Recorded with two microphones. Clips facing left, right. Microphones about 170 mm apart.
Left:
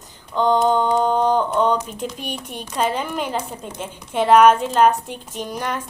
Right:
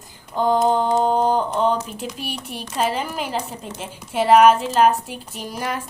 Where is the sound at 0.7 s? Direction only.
40° right (ahead or behind).